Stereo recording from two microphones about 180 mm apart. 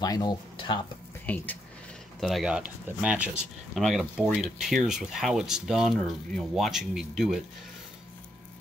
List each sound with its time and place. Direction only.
0.0 s speech: 20° left (ahead or behind)
1.2 s speech: 10° left (ahead or behind)